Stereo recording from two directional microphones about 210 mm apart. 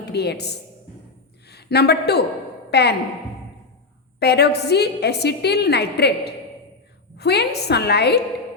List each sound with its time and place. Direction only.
0.0 s a woman's voice: 50° left (ahead or behind)
2.6 s a sound: 50° left (ahead or behind)
4.2 s a woman's voice: 50° left (ahead or behind)